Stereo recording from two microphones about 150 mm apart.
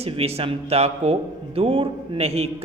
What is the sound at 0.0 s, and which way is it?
A man's voice, 40° right (ahead or behind).